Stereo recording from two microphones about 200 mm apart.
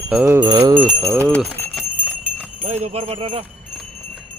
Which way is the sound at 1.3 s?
10° left (ahead or behind).